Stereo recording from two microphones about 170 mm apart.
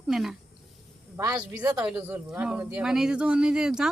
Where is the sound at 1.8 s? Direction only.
5° right (ahead or behind).